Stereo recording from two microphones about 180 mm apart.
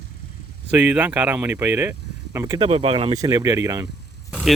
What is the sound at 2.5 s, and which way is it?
Speech, 35° right (ahead or behind).